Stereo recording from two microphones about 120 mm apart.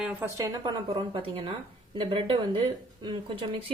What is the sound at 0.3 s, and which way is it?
A woman's voice, 35° right (ahead or behind).